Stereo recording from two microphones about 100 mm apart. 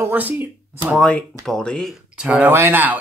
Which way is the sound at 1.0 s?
10° left (ahead or behind).